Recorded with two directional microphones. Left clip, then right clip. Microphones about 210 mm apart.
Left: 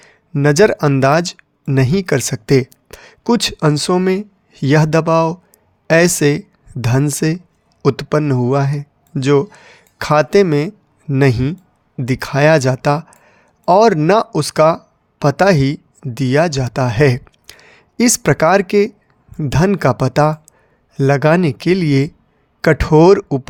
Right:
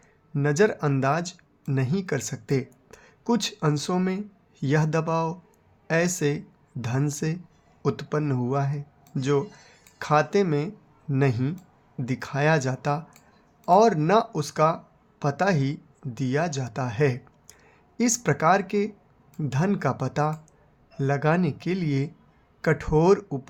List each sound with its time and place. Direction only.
0.0 s speech: 50° left (ahead or behind)